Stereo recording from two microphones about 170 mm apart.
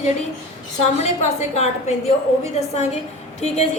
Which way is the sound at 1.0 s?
40° left (ahead or behind).